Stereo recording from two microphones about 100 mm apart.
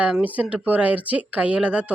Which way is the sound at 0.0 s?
15° right (ahead or behind).